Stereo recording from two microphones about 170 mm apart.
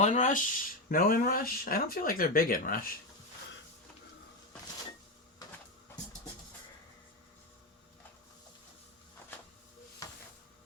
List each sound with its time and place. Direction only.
0.0 s speech: 45° left (ahead or behind)